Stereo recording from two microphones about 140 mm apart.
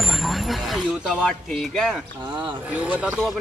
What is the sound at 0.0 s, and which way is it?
Speech, centre (ahead or behind).